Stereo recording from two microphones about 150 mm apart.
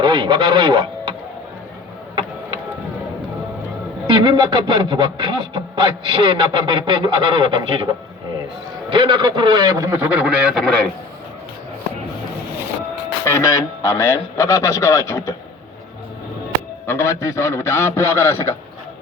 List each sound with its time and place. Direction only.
0.0 s speech: 30° right (ahead or behind)
4.0 s speech: 35° right (ahead or behind)
8.9 s a man's voice: 30° right (ahead or behind); by 10.7 s 5° right (ahead or behind)
13.2 s a man's voice: 20° left (ahead or behind)
16.8 s a man's voice: 20° left (ahead or behind)